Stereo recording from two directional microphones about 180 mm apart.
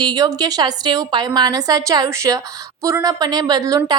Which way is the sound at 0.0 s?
20° right (ahead or behind).